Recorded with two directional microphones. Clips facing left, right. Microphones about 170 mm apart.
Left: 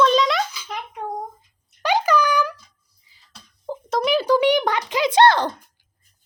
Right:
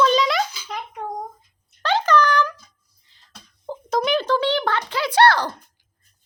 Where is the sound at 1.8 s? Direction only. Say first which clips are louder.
Even; 15° left (ahead or behind).